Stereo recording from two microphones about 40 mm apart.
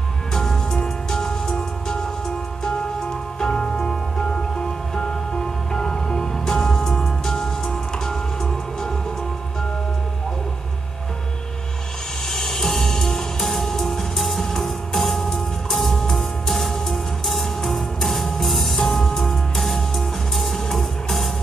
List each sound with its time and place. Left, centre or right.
0.3 s music: centre
12.3 s music: centre